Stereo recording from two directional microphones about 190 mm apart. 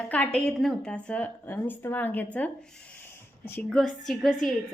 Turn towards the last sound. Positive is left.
turn(degrees=0)  # may be behind; listen again after turning